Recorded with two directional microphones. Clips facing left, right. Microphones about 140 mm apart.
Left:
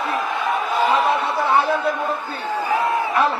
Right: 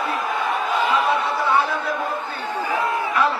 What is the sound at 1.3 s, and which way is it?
Chatter, 25° left (ahead or behind).